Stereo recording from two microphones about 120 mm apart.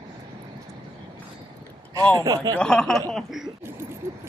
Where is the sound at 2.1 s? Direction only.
35° right (ahead or behind).